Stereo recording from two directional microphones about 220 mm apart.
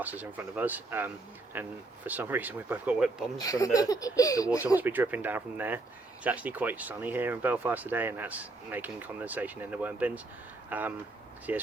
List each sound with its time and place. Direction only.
0.0 s speech: 10° right (ahead or behind)
3.3 s baby laughter: 15° left (ahead or behind)
4.8 s speech: 10° right (ahead or behind)